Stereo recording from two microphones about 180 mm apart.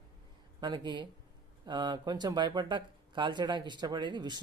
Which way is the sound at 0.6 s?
25° right (ahead or behind).